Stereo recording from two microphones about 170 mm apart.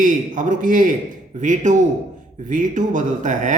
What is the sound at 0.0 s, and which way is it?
Speech, 50° right (ahead or behind).